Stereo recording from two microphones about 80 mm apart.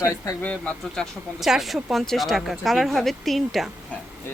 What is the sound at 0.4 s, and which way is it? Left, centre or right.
Speech, centre.